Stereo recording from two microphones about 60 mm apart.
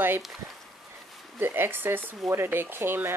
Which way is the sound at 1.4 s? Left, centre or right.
Right.